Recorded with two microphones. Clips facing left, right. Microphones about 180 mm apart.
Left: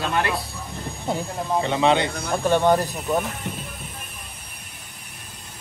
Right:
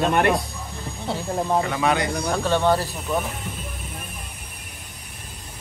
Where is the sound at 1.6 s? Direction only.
25° left (ahead or behind).